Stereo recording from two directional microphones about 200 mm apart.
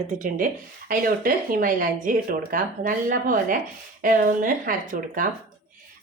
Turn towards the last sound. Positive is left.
turn(degrees=-45)  # may be behind; listen again after turning